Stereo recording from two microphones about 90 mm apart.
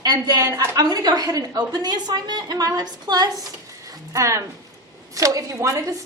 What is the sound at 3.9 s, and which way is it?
A woman's voice, 35° right (ahead or behind).